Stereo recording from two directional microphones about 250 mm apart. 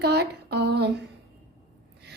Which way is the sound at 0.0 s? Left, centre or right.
Right.